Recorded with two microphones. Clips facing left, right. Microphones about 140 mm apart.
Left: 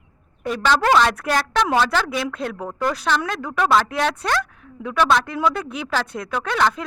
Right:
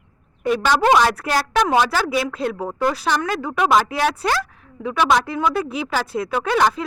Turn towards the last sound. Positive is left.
turn(degrees=-10)  # may be behind; listen again after turning